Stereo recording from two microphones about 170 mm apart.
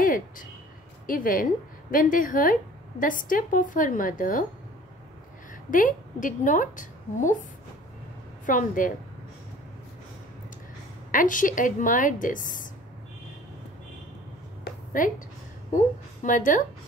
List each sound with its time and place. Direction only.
0.0 s a sound: 55° left (ahead or behind)
1.0 s a woman's voice: 55° left (ahead or behind)
5.7 s a woman's voice: 50° left (ahead or behind)
8.5 s a woman's voice: 50° left (ahead or behind)
11.1 s a woman's voice: 50° left (ahead or behind)
14.6 s a sound: 55° left (ahead or behind)
16.2 s a woman's voice: 50° left (ahead or behind)